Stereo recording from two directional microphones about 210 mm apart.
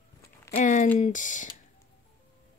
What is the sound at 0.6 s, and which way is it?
Speech, 35° left (ahead or behind).